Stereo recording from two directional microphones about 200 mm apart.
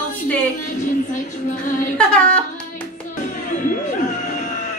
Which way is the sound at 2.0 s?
5° left (ahead or behind).